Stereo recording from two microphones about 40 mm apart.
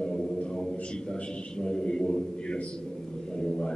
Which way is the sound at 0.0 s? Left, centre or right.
Centre.